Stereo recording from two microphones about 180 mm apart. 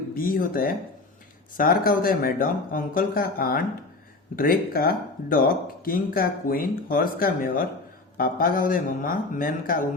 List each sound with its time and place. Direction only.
0.1 s speech: 50° left (ahead or behind)